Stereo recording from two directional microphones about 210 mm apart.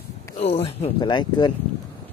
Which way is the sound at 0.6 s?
25° left (ahead or behind).